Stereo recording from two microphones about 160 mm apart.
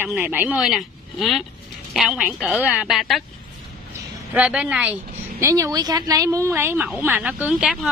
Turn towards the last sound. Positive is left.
turn(degrees=-5)  # may be behind; listen again after turning